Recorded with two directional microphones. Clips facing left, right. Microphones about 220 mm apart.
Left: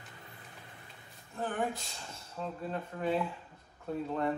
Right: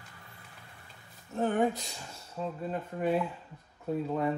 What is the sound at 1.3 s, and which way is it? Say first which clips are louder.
Speech: right 7 dB; 40° right (ahead or behind).